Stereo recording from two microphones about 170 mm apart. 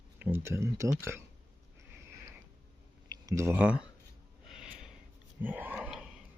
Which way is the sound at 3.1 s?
20° right (ahead or behind).